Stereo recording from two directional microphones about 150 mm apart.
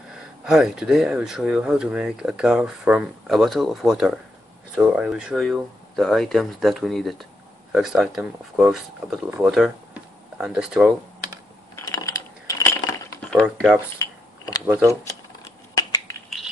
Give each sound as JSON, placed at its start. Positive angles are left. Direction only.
{"t": 0.1, "sound": "speech", "side_deg": -5}
{"t": 11.7, "sound": "coin", "side_deg": 20}
{"t": 13.3, "sound": "speech", "side_deg": 5}
{"t": 13.9, "sound": "mechanisms", "side_deg": 25}
{"t": 14.7, "sound": "speech", "side_deg": -15}
{"t": 15.7, "sound": "a sound", "side_deg": 25}